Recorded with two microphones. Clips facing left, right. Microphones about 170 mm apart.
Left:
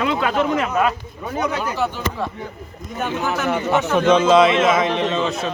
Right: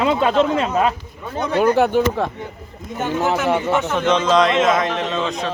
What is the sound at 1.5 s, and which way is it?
Speech, 60° right (ahead or behind).